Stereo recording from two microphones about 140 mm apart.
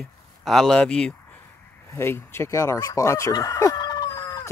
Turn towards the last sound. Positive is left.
turn(degrees=25)  # may be behind; listen again after turning